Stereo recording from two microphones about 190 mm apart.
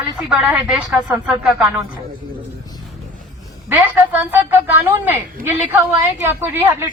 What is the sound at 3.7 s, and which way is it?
A woman's voice, 10° right (ahead or behind).